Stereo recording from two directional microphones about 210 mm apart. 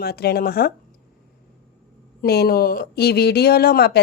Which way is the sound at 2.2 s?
50° left (ahead or behind).